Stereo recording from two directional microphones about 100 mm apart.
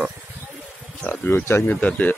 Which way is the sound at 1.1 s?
25° left (ahead or behind).